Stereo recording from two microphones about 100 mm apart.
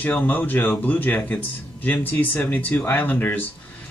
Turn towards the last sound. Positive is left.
turn(degrees=20)  # may be behind; listen again after turning